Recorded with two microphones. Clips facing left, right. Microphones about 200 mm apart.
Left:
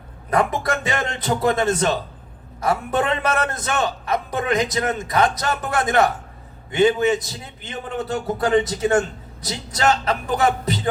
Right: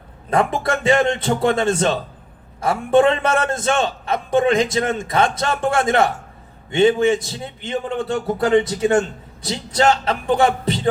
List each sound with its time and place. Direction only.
0.3 s a man's voice: 25° right (ahead or behind)